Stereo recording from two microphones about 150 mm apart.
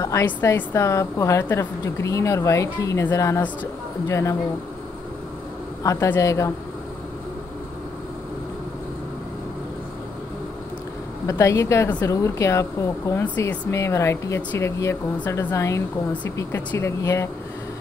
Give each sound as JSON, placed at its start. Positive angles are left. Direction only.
{"t": 0.0, "sound": "a woman's voice", "side_deg": 20}
{"t": 5.9, "sound": "a woman's voice", "side_deg": 15}
{"t": 11.2, "sound": "a woman's voice", "side_deg": 20}